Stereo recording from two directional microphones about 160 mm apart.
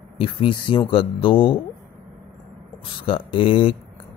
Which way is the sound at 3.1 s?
35° left (ahead or behind).